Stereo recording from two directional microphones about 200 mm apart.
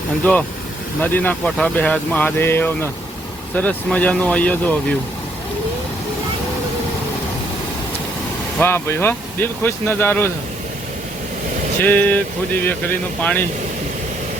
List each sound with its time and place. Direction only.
0.2 s speech: 10° left (ahead or behind)
8.5 s speech: 10° left (ahead or behind)
11.8 s speech: 10° left (ahead or behind)